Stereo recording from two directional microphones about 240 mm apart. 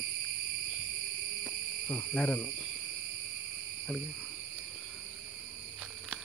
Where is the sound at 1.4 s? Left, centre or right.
Centre.